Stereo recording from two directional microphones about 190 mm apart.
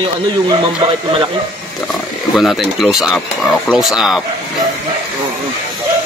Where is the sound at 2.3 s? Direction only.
Centre (ahead or behind).